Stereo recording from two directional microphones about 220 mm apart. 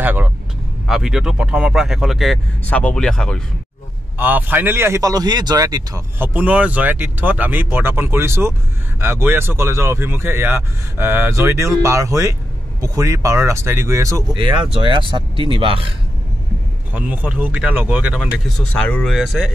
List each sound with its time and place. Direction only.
0.0 s vehicle: 10° right (ahead or behind)
0.8 s speech: centre (ahead or behind)
4.2 s speech: 10° right (ahead or behind); by 15.9 s 25° right (ahead or behind)
16.9 s speech: 5° right (ahead or behind)